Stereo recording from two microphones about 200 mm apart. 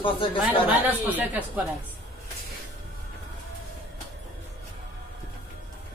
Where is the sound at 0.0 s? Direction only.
25° left (ahead or behind).